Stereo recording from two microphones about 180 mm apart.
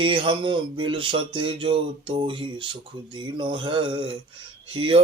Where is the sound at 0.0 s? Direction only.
30° right (ahead or behind).